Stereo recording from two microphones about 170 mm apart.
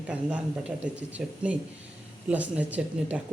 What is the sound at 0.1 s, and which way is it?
Speech, 5° right (ahead or behind).